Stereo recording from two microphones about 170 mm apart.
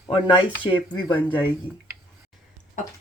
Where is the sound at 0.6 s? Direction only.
25° left (ahead or behind).